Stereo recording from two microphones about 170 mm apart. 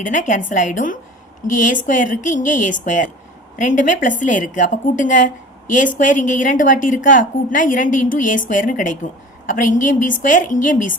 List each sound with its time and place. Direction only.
0.0 s a woman's voice: 50° left (ahead or behind)